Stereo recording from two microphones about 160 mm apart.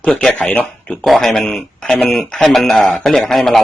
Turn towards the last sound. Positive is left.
turn(degrees=0)  # may be behind; listen again after turning